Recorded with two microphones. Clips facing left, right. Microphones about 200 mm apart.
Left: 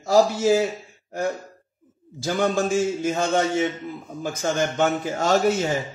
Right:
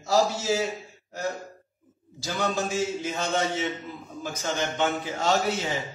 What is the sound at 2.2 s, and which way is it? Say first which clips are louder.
Speech: left 6 dB; 50° left (ahead or behind).